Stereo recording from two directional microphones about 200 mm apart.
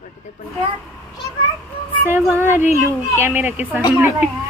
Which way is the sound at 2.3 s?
10° right (ahead or behind).